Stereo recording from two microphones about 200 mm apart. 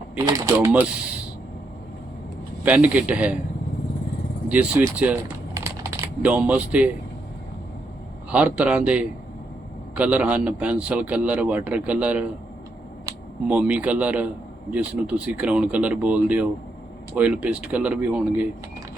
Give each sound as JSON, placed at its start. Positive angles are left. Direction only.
{"t": 0.2, "sound": "a man's voice", "side_deg": -20}
{"t": 2.6, "sound": "a man's voice", "side_deg": -5}
{"t": 4.4, "sound": "speech", "side_deg": -5}
{"t": 8.3, "sound": "a man's voice", "side_deg": -5}